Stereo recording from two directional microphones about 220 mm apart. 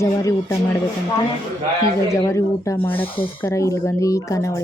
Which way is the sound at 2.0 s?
15° left (ahead or behind).